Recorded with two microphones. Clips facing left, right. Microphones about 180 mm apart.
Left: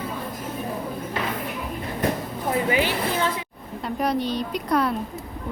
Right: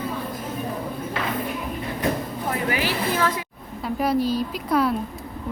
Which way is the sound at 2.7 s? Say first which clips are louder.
Left 1 dB; 20° left (ahead or behind).